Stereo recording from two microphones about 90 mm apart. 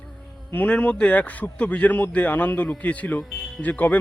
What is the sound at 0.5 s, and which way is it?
A man's voice, 15° left (ahead or behind).